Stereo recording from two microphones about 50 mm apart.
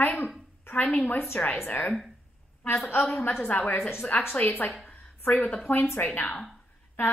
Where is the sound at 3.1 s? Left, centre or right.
Left.